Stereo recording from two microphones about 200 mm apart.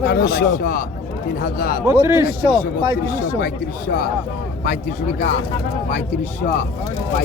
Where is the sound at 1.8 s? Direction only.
10° right (ahead or behind).